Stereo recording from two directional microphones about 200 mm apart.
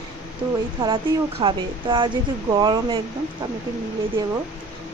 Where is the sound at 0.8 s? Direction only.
25° right (ahead or behind).